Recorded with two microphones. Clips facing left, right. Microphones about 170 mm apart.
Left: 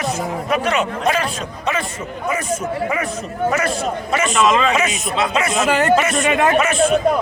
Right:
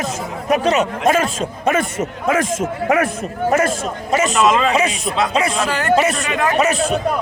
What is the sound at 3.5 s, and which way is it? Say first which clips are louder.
A man's voice: right 2 dB; 45° right (ahead or behind).